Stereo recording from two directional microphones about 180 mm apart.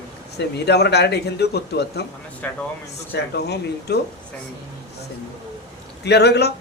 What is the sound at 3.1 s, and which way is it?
Speech, 65° left (ahead or behind).